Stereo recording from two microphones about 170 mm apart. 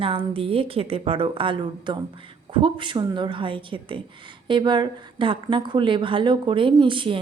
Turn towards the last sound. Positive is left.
turn(degrees=-30)  # may be behind; listen again after turning